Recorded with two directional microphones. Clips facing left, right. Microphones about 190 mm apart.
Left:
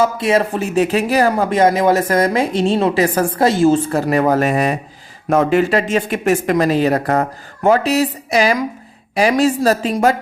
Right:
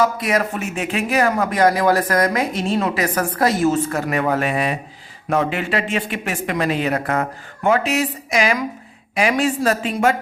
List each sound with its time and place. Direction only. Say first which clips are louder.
0.0 s speech: left 4 dB; 25° left (ahead or behind)